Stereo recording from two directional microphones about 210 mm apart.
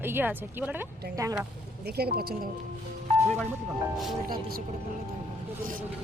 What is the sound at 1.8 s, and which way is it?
Speech, 50° right (ahead or behind).